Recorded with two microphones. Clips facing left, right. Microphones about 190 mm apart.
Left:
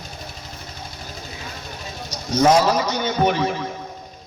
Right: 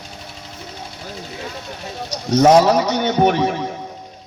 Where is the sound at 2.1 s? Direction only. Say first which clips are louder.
Right 4 dB; 70° right (ahead or behind).